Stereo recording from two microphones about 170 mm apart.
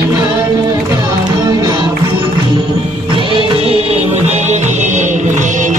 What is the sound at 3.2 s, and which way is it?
Music, 30° right (ahead or behind).